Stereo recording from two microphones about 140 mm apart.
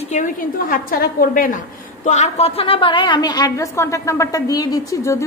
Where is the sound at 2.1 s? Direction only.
50° left (ahead or behind).